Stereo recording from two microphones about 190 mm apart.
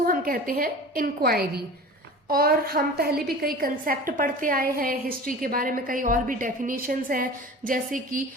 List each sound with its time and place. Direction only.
0.0 s a woman's voice: 50° right (ahead or behind)